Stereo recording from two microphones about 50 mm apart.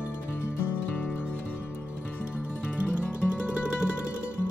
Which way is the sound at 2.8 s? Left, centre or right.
Right.